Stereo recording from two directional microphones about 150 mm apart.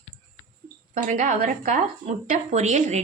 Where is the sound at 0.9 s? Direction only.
55° right (ahead or behind).